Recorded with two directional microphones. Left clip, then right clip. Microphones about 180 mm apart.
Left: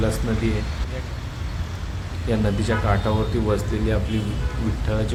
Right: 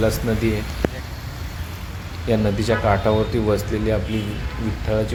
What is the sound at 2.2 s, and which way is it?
Speech, 25° right (ahead or behind).